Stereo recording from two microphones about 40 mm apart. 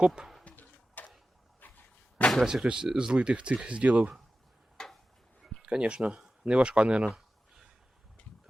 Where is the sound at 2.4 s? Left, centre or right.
Right.